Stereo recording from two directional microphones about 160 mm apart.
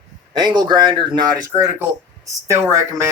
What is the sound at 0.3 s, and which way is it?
Speech, 25° right (ahead or behind).